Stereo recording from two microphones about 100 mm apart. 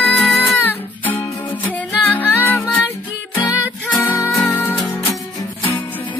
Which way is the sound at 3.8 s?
15° left (ahead or behind).